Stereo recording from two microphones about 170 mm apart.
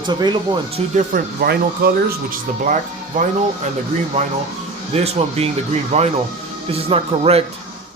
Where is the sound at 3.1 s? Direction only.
50° right (ahead or behind).